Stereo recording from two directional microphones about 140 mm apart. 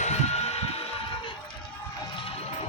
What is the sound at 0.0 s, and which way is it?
Music, 50° left (ahead or behind).